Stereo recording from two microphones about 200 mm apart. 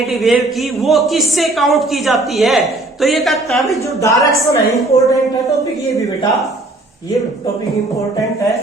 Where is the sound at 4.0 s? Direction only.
15° left (ahead or behind).